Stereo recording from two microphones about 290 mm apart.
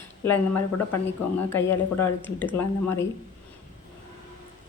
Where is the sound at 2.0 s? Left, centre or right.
Centre.